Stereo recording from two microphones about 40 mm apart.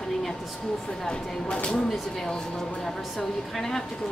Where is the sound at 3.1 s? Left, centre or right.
Centre.